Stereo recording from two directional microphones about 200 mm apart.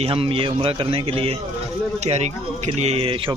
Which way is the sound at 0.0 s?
25° right (ahead or behind).